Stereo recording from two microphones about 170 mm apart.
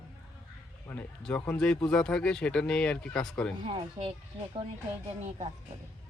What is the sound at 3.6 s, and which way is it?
Speech, 35° right (ahead or behind).